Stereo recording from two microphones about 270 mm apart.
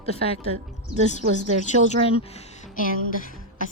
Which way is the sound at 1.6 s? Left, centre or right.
Left.